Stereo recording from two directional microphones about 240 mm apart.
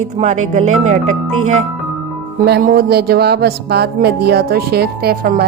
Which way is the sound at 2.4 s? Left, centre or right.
Right.